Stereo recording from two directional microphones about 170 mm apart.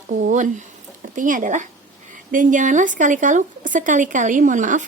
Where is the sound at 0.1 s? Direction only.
50° right (ahead or behind).